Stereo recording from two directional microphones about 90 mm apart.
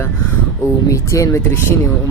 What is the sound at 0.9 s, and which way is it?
Speech, 35° left (ahead or behind).